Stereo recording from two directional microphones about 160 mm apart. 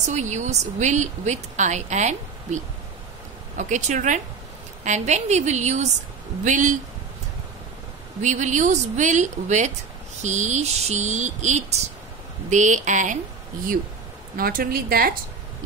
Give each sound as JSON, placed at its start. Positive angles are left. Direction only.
{"t": 0.0, "sound": "a woman's voice", "side_deg": -45}
{"t": 8.2, "sound": "a woman's voice", "side_deg": -50}
{"t": 14.3, "sound": "a woman's voice", "side_deg": -65}